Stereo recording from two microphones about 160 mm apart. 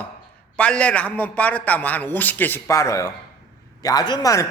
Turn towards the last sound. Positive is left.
turn(degrees=20)  # may be behind; listen again after turning